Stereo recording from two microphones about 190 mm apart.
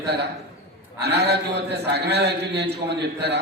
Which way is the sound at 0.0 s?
60° right (ahead or behind).